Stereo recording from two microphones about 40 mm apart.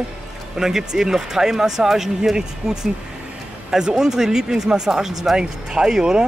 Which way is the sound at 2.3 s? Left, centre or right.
Centre.